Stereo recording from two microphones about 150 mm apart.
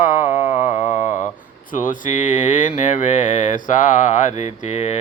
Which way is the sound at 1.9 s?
60° left (ahead or behind).